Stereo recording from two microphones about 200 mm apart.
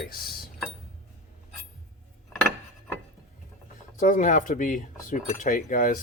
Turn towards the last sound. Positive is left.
turn(degrees=45)  # may be behind; listen again after turning